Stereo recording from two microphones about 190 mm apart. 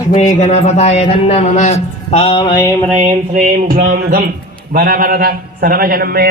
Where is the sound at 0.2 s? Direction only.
40° left (ahead or behind); by 2.6 s 20° left (ahead or behind).